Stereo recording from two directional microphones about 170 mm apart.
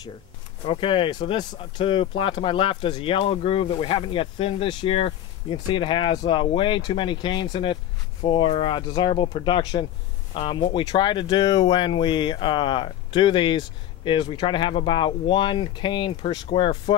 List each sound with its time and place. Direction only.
0.7 s speech: 30° left (ahead or behind)